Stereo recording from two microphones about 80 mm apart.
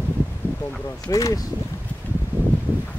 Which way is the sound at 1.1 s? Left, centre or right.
Left.